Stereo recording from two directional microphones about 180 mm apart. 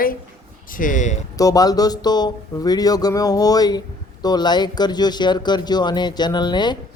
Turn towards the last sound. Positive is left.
turn(degrees=25)  # may be behind; listen again after turning